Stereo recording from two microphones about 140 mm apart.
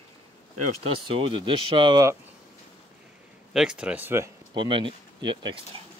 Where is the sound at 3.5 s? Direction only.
5° right (ahead or behind).